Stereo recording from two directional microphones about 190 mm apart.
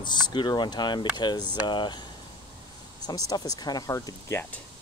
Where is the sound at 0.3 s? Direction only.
25° left (ahead or behind).